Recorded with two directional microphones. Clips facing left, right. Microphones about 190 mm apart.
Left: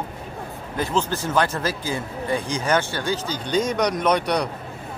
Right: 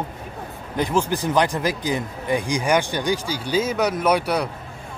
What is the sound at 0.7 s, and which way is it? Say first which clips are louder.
Speech: right 2 dB; 15° right (ahead or behind).